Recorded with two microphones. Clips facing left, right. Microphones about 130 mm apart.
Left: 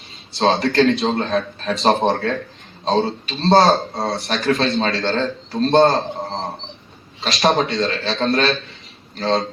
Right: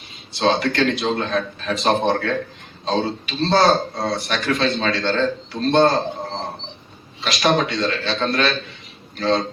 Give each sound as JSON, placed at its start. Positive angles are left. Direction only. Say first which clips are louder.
{"t": 0.3, "sound": "a man's voice", "louder": "left 3 dB", "side_deg": 35}
{"t": 7.2, "sound": "a man's voice", "louder": "left 1 dB", "side_deg": 30}